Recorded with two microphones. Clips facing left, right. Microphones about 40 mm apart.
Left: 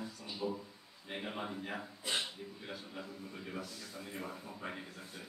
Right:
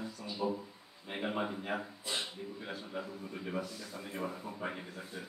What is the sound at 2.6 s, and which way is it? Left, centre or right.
A man's voice, centre.